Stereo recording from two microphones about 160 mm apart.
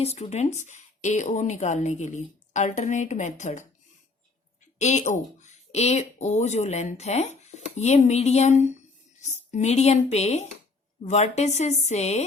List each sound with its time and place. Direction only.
0.0 s speech: 40° left (ahead or behind)
4.8 s speech: 45° left (ahead or behind)